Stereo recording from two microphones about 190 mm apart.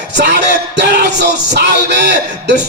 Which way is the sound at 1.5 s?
60° right (ahead or behind).